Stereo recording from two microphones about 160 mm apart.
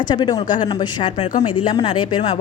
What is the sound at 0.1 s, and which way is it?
Speech, 25° left (ahead or behind).